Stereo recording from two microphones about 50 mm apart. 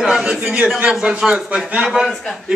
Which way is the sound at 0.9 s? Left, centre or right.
Centre.